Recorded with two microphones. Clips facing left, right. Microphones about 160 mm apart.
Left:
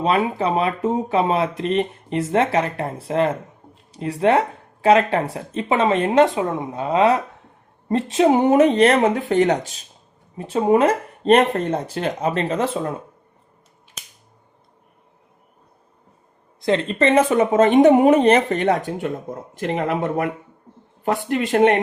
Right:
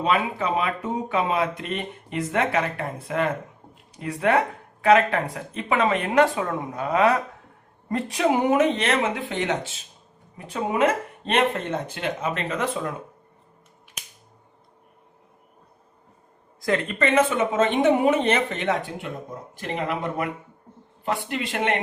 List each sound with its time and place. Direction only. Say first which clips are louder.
0.0 s speech: left 4 dB; 35° left (ahead or behind)
16.6 s speech: left 4 dB; 25° left (ahead or behind); by 20.2 s 50° left (ahead or behind)
21.2 s speech: left 12 dB; 45° left (ahead or behind)